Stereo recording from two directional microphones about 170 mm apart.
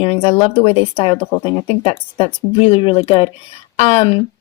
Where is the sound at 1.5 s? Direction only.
30° left (ahead or behind).